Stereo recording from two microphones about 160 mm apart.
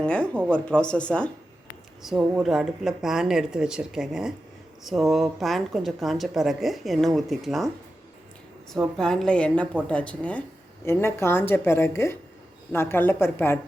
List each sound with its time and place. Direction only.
0.0 s a woman's voice: 5° left (ahead or behind)
8.7 s a woman's voice: 5° left (ahead or behind)